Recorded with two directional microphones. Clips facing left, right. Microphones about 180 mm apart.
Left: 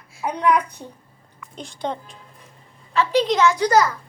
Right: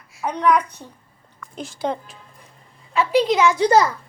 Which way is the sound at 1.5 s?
5° right (ahead or behind).